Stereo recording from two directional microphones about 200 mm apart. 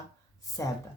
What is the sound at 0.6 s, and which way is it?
Speech, 15° left (ahead or behind).